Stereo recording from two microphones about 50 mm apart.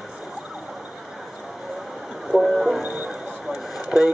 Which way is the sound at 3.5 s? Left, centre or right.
Centre.